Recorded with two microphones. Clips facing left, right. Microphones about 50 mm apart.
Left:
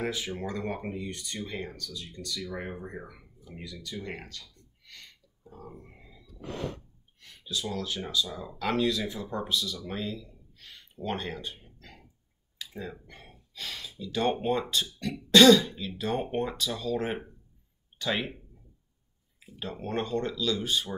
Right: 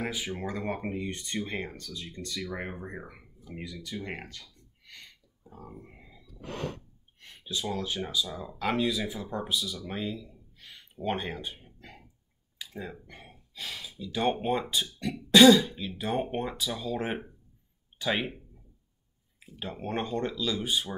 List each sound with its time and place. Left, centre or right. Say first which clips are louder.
0.0 s speech: left 1 dB; centre
1.0 s speech: right 3 dB; right
5.4 s a sound: even; centre
7.2 s a sound: even; right
8.0 s speech: even; centre
19.6 s speech: left 1 dB; centre